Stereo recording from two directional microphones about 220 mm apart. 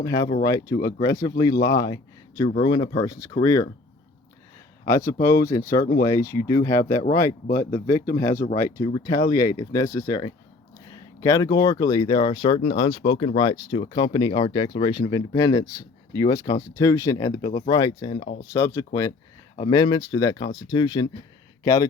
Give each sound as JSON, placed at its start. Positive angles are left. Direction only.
{"t": 0.0, "sound": "speech", "side_deg": 15}
{"t": 4.9, "sound": "speech", "side_deg": 15}